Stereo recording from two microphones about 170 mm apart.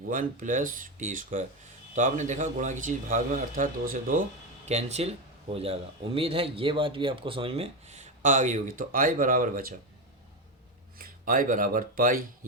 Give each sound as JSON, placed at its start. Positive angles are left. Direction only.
{"t": 0.1, "sound": "a man's voice", "side_deg": -50}
{"t": 4.6, "sound": "speech", "side_deg": -40}
{"t": 10.9, "sound": "speech", "side_deg": -55}